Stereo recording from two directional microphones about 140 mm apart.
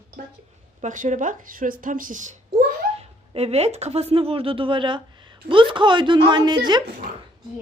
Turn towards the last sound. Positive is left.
turn(degrees=-30)  # may be behind; listen again after turning